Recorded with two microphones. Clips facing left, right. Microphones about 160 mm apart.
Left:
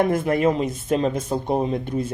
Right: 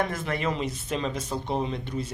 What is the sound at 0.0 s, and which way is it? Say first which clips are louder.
Speech: left 9 dB; 50° left (ahead or behind).